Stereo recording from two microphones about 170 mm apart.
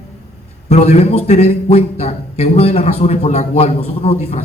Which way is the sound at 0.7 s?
40° left (ahead or behind).